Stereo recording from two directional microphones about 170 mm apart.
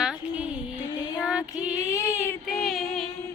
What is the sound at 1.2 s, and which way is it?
Music, 5° right (ahead or behind).